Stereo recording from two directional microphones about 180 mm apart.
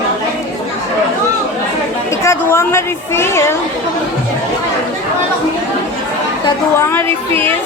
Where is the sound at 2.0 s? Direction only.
15° left (ahead or behind).